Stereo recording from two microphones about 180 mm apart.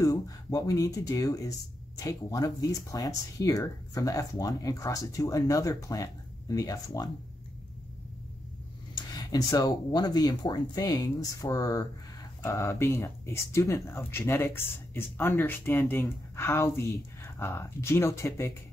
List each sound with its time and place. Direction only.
0.0 s speech: 20° left (ahead or behind)
8.9 s speech: 20° left (ahead or behind)